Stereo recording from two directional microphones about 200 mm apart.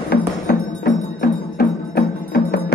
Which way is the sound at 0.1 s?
50° left (ahead or behind).